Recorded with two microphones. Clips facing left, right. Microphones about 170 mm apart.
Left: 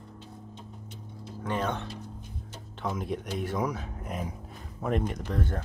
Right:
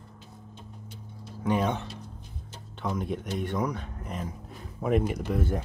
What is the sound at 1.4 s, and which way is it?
Speech, 10° right (ahead or behind).